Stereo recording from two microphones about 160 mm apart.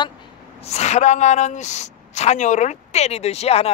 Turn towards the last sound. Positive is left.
turn(degrees=40)  # may be behind; listen again after turning